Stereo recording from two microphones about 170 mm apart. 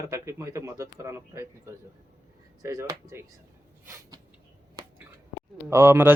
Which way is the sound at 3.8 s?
15° right (ahead or behind).